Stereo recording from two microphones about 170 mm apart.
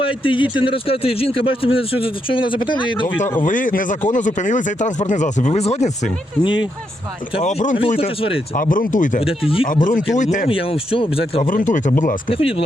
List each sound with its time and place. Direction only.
0.0 s a man's voice: 30° left (ahead or behind)
3.4 s speech: 50° left (ahead or behind)
7.4 s speech: 45° left (ahead or behind)
7.8 s a man's voice: 35° left (ahead or behind)
8.5 s speech: 50° left (ahead or behind)
9.2 s a man's voice: 35° left (ahead or behind)
9.8 s speech: 50° left (ahead or behind)
10.5 s a man's voice: 35° left (ahead or behind)
11.4 s speech: 50° left (ahead or behind)
12.3 s a man's voice: 35° left (ahead or behind)